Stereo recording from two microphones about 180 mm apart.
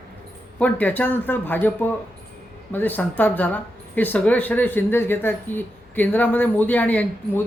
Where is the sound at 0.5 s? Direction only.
10° left (ahead or behind).